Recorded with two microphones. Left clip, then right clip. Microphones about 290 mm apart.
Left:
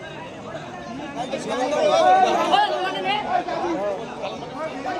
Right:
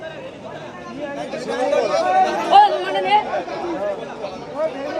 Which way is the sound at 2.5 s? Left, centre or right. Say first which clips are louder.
Right 8 dB; right.